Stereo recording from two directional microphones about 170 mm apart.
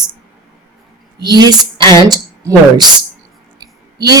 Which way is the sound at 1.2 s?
25° right (ahead or behind).